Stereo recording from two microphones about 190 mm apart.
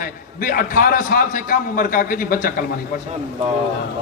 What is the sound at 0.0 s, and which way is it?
A man's voice, 50° left (ahead or behind).